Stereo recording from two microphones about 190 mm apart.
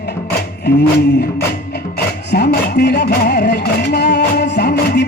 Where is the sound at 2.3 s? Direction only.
60° left (ahead or behind).